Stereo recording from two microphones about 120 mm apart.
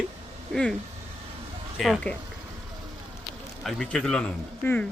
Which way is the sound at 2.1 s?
15° left (ahead or behind).